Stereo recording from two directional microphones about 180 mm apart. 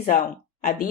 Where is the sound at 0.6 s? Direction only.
50° left (ahead or behind).